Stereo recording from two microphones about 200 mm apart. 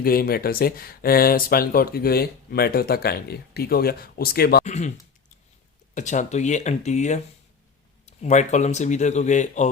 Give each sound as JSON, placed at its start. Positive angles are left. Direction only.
{"t": 0.0, "sound": "speech", "side_deg": 45}
{"t": 4.6, "sound": "speech", "side_deg": 35}
{"t": 6.0, "sound": "speech", "side_deg": 40}